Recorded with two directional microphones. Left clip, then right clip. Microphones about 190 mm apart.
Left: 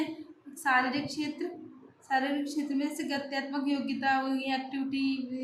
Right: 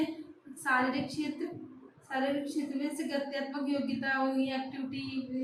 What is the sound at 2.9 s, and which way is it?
A woman's voice, 55° left (ahead or behind).